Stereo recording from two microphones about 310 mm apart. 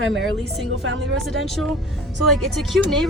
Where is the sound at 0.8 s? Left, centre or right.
Right.